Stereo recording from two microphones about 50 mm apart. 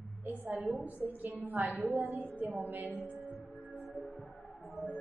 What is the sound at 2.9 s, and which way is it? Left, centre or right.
Music, left.